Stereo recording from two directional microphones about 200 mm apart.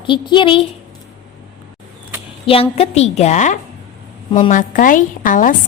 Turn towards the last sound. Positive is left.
turn(degrees=40)  # may be behind; listen again after turning